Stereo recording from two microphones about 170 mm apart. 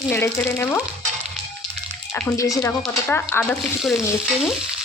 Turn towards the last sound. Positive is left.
turn(degrees=10)  # may be behind; listen again after turning